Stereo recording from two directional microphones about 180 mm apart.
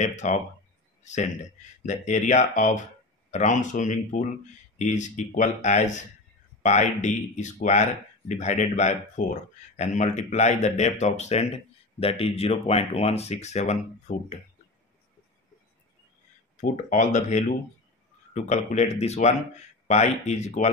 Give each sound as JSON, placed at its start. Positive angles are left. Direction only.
{"t": 0.0, "sound": "a man's voice", "side_deg": 40}
{"t": 16.6, "sound": "speech", "side_deg": 45}